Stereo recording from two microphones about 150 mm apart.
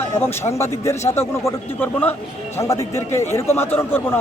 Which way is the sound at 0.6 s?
20° left (ahead or behind).